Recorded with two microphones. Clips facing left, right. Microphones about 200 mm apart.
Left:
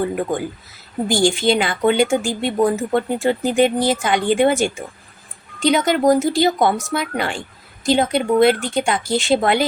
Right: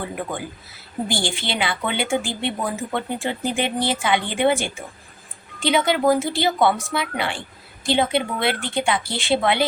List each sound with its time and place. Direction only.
1.0 s a woman's voice: 45° left (ahead or behind)